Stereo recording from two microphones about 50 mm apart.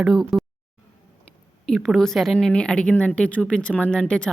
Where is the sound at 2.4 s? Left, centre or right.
Centre.